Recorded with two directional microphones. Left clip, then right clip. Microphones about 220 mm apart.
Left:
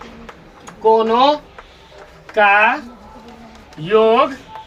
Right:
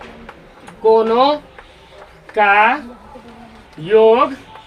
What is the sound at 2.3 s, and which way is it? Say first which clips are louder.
Speech: even; 5° left (ahead or behind).